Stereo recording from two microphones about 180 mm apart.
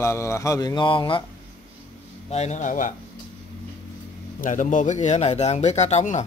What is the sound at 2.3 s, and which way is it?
Speech, 40° left (ahead or behind).